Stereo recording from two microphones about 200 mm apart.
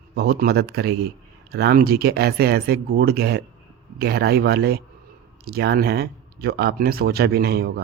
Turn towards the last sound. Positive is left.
turn(degrees=-50)  # may be behind; listen again after turning